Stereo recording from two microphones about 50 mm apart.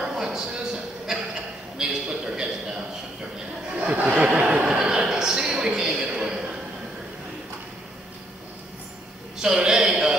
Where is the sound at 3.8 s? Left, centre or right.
Centre.